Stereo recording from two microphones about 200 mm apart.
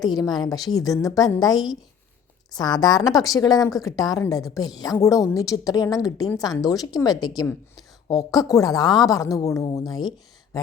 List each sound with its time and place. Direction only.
0.2 s a woman's voice: 20° left (ahead or behind)